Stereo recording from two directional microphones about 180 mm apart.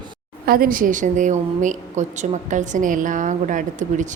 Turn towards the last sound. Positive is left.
turn(degrees=-45)  # may be behind; listen again after turning